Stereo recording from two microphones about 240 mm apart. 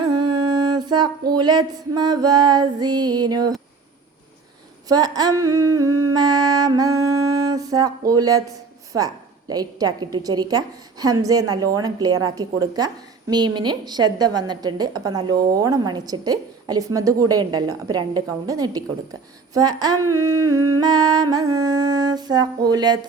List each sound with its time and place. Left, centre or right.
0.5 s a sound: centre
1.5 s a woman's voice: centre
4.9 s a woman's voice: centre